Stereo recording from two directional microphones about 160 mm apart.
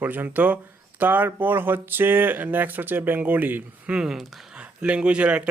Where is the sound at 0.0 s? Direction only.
10° right (ahead or behind).